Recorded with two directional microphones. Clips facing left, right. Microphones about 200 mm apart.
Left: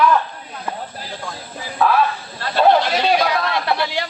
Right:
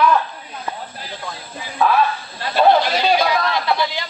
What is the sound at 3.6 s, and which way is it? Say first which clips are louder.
Speech: even; 65° left (ahead or behind).